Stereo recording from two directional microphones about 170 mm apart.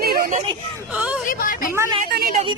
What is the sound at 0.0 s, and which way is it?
Hubbub, 60° right (ahead or behind).